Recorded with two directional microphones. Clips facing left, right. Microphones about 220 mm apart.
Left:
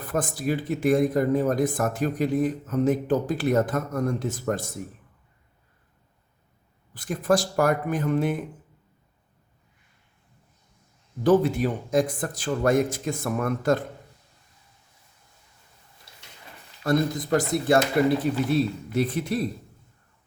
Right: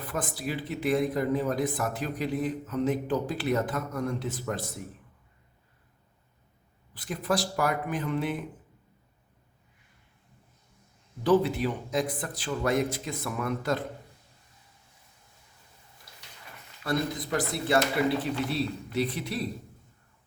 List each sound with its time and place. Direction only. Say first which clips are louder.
0.0 s speech: left 6 dB; 45° left (ahead or behind)
6.9 s speech: left 6 dB; 45° left (ahead or behind)
11.2 s speech: left 4 dB; 45° left (ahead or behind)
16.8 s speech: left 6 dB; 45° left (ahead or behind)